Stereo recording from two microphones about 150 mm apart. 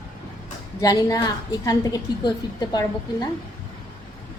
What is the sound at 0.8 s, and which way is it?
A woman's voice, 25° left (ahead or behind).